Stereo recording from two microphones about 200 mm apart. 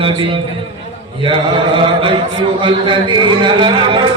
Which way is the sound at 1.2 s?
25° right (ahead or behind).